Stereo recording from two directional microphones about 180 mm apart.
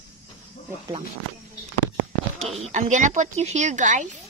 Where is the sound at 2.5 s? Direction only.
35° right (ahead or behind).